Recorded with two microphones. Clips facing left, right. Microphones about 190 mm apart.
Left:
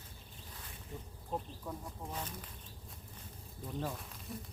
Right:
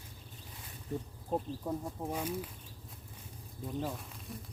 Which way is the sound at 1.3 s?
40° right (ahead or behind).